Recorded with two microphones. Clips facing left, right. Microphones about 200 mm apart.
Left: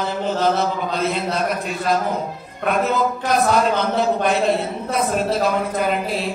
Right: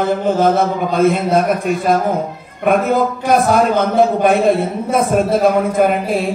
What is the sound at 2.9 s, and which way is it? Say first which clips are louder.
A man's voice: right 6 dB; 50° right (ahead or behind).